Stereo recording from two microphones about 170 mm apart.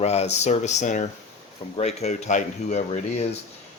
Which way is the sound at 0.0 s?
40° left (ahead or behind).